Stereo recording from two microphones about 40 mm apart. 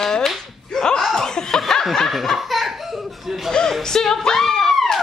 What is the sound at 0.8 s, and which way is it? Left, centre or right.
Laughter, centre.